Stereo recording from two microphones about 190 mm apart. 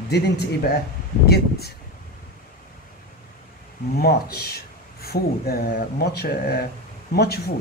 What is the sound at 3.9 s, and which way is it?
Speech, 55° left (ahead or behind).